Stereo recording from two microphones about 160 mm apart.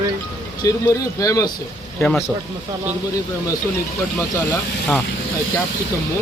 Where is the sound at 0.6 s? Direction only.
20° left (ahead or behind).